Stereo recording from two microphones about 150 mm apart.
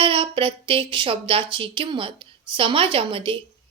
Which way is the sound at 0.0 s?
35° right (ahead or behind).